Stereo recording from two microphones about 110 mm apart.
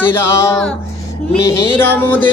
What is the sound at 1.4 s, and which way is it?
Music, 25° left (ahead or behind).